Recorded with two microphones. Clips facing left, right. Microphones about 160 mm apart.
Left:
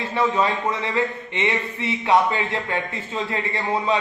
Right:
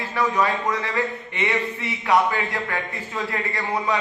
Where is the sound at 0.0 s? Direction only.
25° left (ahead or behind).